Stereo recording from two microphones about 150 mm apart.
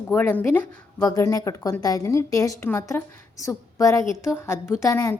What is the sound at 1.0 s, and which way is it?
A woman's voice, 20° left (ahead or behind).